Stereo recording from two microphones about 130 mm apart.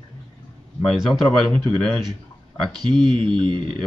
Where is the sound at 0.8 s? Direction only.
Centre (ahead or behind).